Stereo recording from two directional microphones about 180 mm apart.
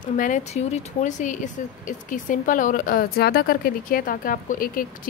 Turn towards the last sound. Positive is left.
turn(degrees=50)  # may be behind; listen again after turning